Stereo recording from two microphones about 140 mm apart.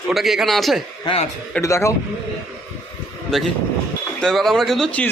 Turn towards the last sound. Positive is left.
turn(degrees=10)  # may be behind; listen again after turning